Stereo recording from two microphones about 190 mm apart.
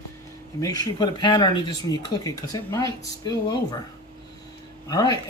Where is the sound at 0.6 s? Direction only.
20° left (ahead or behind).